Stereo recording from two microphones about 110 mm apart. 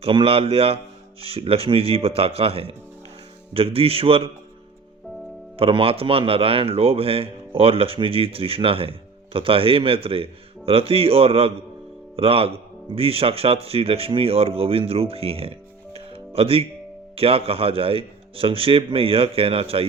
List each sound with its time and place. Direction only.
0.0 s a man's voice: 55° right (ahead or behind)
5.5 s a man's voice: 60° right (ahead or behind)